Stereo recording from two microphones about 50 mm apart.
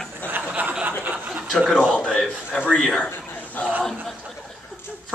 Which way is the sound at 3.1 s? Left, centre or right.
Left.